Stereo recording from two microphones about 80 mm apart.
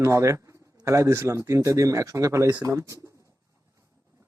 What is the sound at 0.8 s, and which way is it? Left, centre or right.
Speech, right.